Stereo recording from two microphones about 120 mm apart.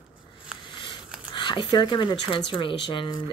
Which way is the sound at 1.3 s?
40° left (ahead or behind).